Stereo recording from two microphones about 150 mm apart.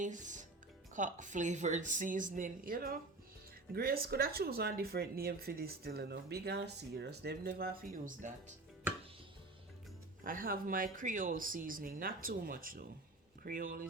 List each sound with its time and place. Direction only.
0.0 s speech: 55° right (ahead or behind); by 3.0 s 70° right (ahead or behind)
3.8 s speech: 85° right; by 8.5 s 55° right (ahead or behind)
10.2 s speech: 70° right (ahead or behind)